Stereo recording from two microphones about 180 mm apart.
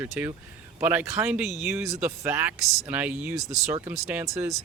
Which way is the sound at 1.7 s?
15° right (ahead or behind).